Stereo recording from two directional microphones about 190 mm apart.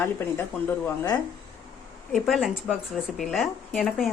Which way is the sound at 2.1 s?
Centre (ahead or behind).